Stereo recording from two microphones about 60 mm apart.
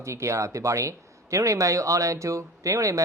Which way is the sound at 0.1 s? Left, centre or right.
Right.